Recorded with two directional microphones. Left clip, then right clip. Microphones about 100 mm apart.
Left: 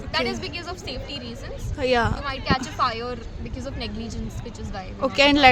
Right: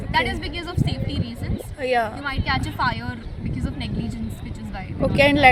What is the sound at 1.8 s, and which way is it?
Speech, 50° left (ahead or behind).